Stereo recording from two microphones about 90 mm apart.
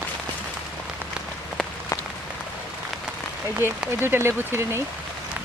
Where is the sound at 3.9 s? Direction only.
25° right (ahead or behind).